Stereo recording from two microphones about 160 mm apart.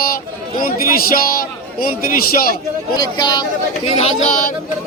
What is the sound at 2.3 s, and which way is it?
Speech, 65° left (ahead or behind).